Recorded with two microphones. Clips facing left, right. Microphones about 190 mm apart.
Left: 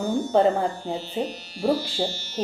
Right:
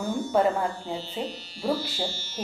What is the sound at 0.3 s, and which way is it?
Speech, 30° left (ahead or behind).